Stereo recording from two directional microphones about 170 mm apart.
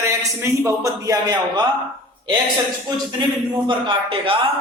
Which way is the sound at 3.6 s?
30° right (ahead or behind).